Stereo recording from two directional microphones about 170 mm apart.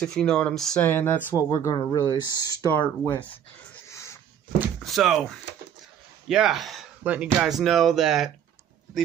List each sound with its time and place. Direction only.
0.0 s speech: 5° left (ahead or behind); by 3.3 s 25° left (ahead or behind)
3.8 s dog: 15° left (ahead or behind)
4.8 s speech: centre (ahead or behind)
6.2 s speech: 5° right (ahead or behind)